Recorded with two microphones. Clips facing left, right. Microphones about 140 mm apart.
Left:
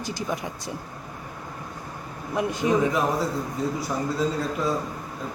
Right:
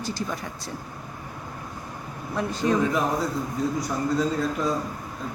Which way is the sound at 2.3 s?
15° left (ahead or behind).